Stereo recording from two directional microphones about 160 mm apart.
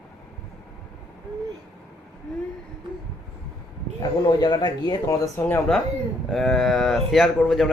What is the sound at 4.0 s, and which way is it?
Speech, 25° left (ahead or behind).